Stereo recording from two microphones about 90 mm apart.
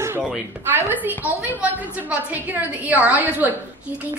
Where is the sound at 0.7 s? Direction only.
20° right (ahead or behind).